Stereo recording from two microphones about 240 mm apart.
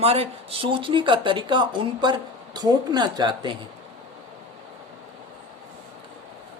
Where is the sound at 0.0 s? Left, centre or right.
Right.